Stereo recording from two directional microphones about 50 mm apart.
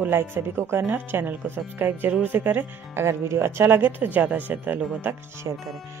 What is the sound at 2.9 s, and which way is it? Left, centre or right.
Speech, right.